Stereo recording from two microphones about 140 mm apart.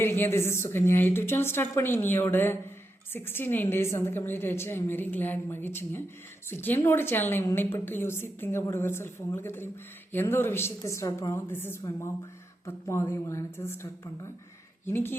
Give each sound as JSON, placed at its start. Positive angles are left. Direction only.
{"t": 0.0, "sound": "a woman's voice", "side_deg": 15}